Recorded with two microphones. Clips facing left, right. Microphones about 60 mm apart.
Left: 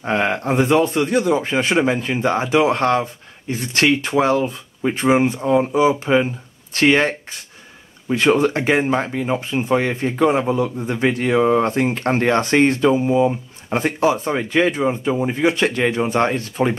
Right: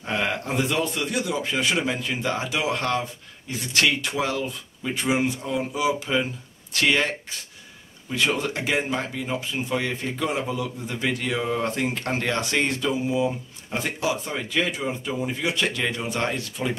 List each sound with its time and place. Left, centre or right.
0.0 s speech: left